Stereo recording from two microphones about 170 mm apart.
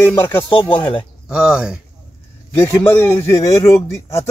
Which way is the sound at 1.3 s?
5° right (ahead or behind).